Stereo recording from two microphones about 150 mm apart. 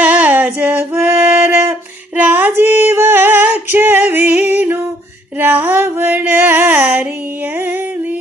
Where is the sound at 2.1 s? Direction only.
10° right (ahead or behind).